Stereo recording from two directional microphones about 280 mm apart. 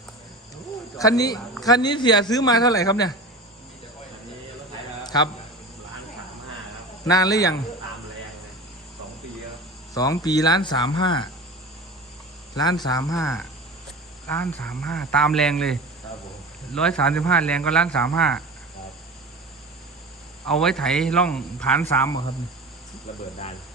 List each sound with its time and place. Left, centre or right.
0.5 s cricket: centre
1.6 s speech: centre
5.0 s a sound: centre
7.0 s speech: centre
9.9 s speech: centre
12.5 s speech: centre
20.5 s speech: centre